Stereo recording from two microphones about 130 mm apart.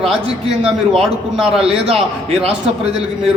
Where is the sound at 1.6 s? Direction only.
50° right (ahead or behind).